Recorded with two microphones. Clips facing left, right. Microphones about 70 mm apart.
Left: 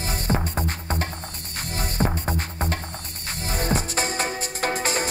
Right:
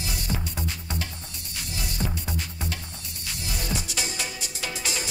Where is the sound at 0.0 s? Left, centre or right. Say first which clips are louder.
Left 6 dB; left.